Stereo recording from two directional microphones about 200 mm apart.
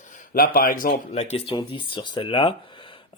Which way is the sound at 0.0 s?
40° left (ahead or behind).